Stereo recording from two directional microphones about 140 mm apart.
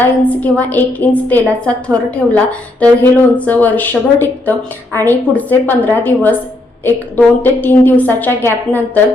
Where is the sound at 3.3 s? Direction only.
10° left (ahead or behind).